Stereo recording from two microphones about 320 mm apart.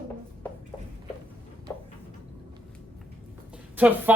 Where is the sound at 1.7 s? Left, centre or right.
Centre.